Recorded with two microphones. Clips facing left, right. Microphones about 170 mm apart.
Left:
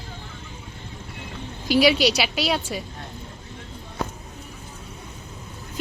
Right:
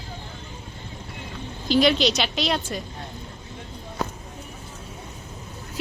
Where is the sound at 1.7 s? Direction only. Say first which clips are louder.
Left 1 dB; 10° left (ahead or behind).